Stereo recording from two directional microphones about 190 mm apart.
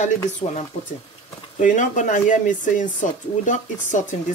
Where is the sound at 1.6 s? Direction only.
40° left (ahead or behind).